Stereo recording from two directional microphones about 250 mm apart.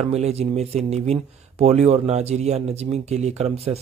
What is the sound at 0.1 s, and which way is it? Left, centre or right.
Speech, right.